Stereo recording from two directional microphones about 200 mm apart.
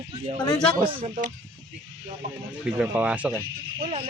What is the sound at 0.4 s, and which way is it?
Speech, 20° left (ahead or behind).